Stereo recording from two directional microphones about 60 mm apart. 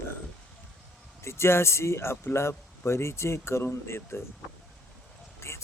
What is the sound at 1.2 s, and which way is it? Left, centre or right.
Speech, left.